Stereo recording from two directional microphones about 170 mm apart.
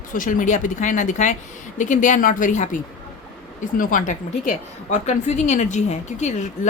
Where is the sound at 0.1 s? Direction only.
50° left (ahead or behind).